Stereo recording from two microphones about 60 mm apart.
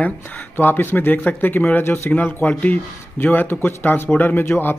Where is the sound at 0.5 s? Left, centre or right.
Left.